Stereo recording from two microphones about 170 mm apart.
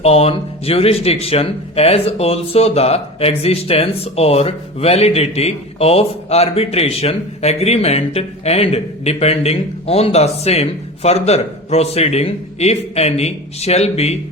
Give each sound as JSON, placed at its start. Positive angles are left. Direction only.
{"t": 0.0, "sound": "speech", "side_deg": 35}